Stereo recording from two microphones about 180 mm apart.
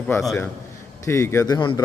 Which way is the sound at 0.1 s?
15° left (ahead or behind).